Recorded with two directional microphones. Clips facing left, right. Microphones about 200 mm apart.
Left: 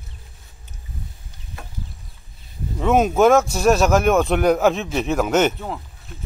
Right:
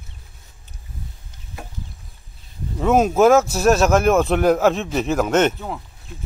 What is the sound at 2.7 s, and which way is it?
A man's voice, centre (ahead or behind).